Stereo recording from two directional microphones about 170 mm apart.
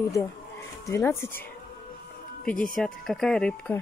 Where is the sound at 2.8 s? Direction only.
5° left (ahead or behind).